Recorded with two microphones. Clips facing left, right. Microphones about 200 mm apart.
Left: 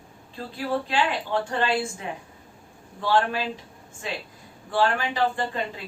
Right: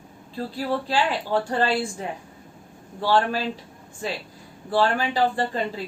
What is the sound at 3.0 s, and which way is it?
Speech, 35° right (ahead or behind).